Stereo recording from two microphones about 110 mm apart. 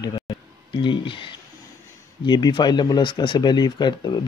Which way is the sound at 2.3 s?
40° left (ahead or behind).